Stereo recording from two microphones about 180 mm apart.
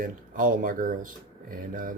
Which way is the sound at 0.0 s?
50° right (ahead or behind).